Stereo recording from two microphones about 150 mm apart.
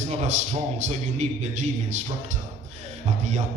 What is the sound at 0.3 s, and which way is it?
A man's voice, 50° right (ahead or behind).